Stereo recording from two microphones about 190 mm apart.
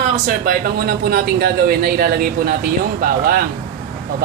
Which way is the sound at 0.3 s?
50° right (ahead or behind).